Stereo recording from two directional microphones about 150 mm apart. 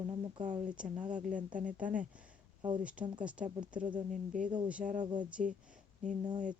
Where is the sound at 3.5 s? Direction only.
30° right (ahead or behind).